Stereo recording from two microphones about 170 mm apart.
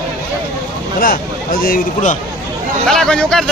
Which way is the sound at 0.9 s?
60° left (ahead or behind).